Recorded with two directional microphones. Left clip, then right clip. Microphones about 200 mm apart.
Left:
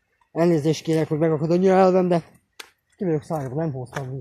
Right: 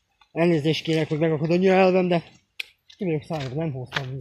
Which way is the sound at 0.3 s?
10° left (ahead or behind).